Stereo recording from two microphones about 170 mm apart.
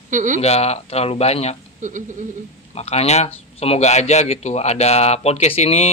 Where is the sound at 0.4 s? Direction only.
40° left (ahead or behind).